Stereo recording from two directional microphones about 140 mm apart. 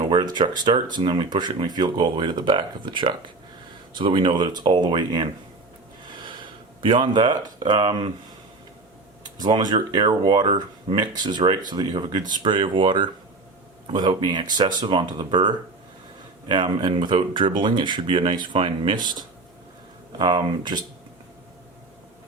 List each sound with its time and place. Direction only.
0.0 s a sound: 35° right (ahead or behind)
0.3 s speech: 35° right (ahead or behind)
9.4 s speech: 30° right (ahead or behind)
20.1 s speech: 35° right (ahead or behind)